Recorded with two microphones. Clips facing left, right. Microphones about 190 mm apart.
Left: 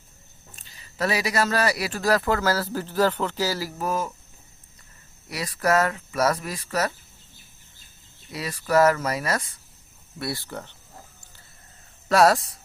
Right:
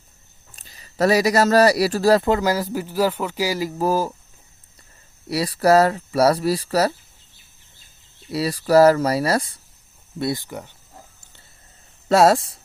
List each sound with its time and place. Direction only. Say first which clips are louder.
0.5 s speech: right 8 dB; 40° right (ahead or behind)
5.3 s speech: right 7 dB; 30° right (ahead or behind)
8.3 s speech: right 7 dB; 35° right (ahead or behind)
10.2 s speech: right 6 dB; 20° right (ahead or behind)
12.0 s speech: right 3 dB; 25° right (ahead or behind)